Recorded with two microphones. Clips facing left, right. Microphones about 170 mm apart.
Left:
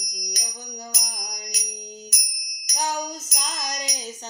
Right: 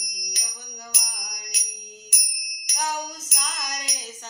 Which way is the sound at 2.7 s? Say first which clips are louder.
Left 2 dB; 30° left (ahead or behind).